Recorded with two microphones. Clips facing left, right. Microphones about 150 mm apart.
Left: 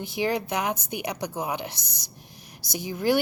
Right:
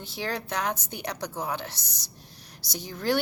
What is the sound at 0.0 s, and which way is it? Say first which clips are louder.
A woman's voice: left 6 dB; 15° left (ahead or behind).